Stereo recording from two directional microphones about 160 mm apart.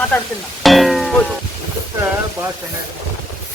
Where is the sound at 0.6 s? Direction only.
Centre (ahead or behind).